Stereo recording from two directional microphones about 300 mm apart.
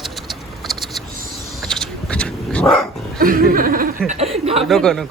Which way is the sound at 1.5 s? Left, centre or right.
Centre.